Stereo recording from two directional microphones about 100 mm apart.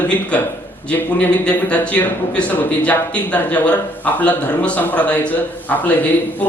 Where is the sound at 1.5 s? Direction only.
10° left (ahead or behind).